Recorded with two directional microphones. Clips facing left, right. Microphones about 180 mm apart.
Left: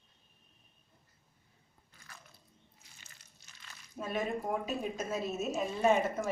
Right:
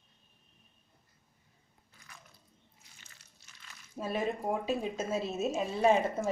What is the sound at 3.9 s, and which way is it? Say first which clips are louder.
A woman's voice: right 2 dB; 30° right (ahead or behind).